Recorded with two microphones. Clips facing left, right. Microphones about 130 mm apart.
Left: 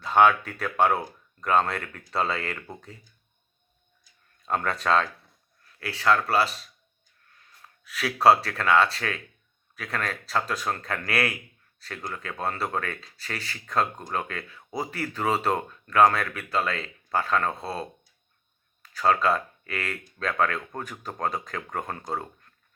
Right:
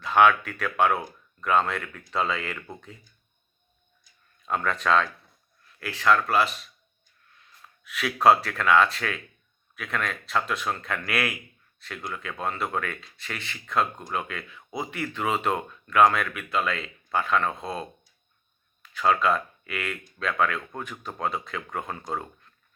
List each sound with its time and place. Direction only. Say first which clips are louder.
0.0 s speech: even; 35° left (ahead or behind)
4.4 s speech: even; 35° left (ahead or behind)
7.9 s speech: even; 35° left (ahead or behind)